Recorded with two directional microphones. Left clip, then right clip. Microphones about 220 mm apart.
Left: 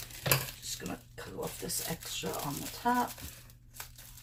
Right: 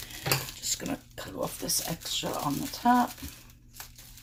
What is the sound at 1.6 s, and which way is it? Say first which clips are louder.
Speech: right 7 dB; 50° right (ahead or behind).